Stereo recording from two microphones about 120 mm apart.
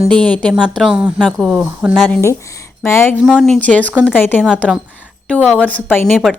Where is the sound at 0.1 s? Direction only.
10° left (ahead or behind).